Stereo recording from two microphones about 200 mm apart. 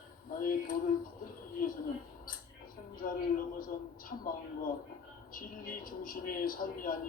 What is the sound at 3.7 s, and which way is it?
Speech, 45° left (ahead or behind).